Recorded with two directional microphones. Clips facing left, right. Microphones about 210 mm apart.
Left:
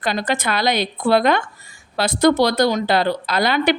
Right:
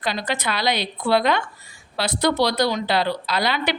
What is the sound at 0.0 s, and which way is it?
A woman's voice, 50° left (ahead or behind).